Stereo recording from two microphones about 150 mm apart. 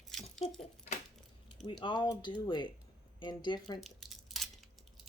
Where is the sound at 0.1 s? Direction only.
Centre (ahead or behind).